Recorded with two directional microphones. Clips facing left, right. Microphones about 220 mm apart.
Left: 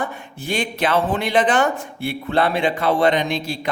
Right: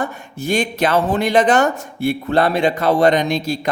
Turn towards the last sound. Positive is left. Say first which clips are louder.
# right 4 dB
turn(degrees=-40)  # may be behind; listen again after turning